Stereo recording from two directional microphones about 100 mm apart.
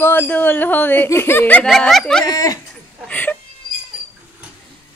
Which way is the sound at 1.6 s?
Centre (ahead or behind).